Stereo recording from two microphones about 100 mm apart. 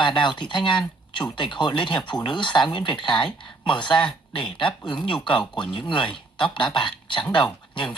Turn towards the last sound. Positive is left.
turn(degrees=50)  # may be behind; listen again after turning